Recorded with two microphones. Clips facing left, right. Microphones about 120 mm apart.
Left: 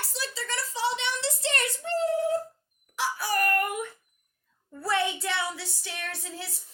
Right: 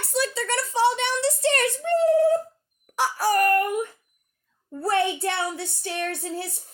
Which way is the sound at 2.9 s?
50° right (ahead or behind).